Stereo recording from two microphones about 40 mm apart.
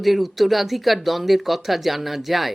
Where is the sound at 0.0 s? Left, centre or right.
Centre.